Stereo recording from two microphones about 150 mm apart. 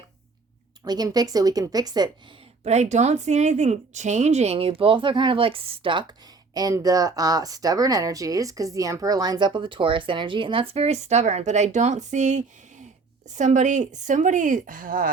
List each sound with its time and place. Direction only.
0.9 s speech: 25° right (ahead or behind)
2.6 s speech: 50° right (ahead or behind); by 15.1 s 70° right (ahead or behind)